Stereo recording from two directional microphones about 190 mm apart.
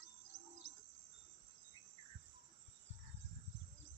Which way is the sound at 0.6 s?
40° right (ahead or behind).